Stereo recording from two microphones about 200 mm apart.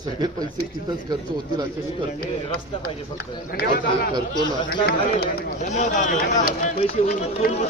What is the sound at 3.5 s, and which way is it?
Speech, 50° left (ahead or behind).